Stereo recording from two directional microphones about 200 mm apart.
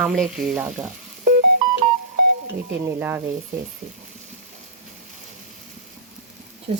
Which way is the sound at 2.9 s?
10° right (ahead or behind).